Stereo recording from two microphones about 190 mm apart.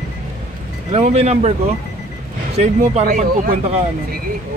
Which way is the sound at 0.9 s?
35° right (ahead or behind).